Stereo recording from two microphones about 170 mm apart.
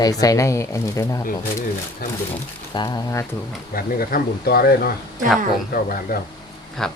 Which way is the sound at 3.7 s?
60° left (ahead or behind).